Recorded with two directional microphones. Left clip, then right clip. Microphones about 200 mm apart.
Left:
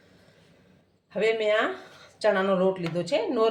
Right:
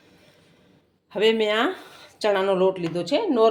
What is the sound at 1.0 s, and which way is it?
Speech, 45° right (ahead or behind).